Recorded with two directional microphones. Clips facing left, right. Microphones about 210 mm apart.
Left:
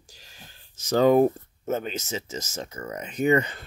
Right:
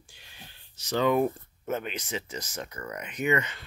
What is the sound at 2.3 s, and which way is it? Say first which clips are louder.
Speech: left 3 dB; 25° left (ahead or behind).